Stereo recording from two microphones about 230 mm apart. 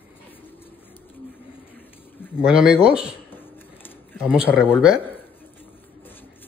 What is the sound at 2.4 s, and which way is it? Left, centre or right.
Speech, centre.